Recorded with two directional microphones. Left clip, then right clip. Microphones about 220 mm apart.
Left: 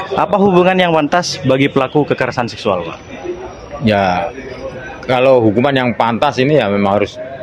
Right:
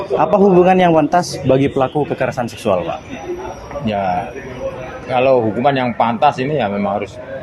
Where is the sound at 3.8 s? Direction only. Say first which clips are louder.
Left 5 dB; 45° left (ahead or behind).